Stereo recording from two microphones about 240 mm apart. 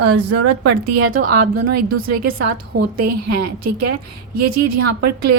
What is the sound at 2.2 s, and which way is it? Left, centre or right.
Speech, right.